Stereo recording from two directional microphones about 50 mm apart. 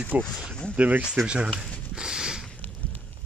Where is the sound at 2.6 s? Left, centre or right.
Left.